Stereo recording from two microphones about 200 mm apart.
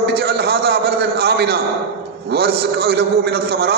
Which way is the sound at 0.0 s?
55° right (ahead or behind).